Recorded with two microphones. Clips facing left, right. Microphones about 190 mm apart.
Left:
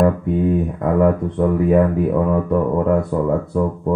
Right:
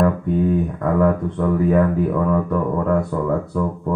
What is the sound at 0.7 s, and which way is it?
Speech, 20° left (ahead or behind).